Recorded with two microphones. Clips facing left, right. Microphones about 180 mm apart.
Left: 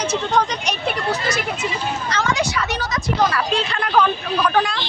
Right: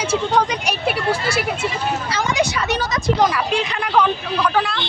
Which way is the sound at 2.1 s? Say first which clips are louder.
Even; 15° right (ahead or behind).